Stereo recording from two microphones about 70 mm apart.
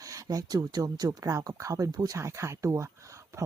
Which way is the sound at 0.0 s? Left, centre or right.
Right.